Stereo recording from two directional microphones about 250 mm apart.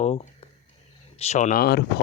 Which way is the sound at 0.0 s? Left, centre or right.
Left.